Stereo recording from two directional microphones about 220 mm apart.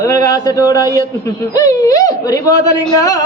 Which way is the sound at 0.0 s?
15° left (ahead or behind).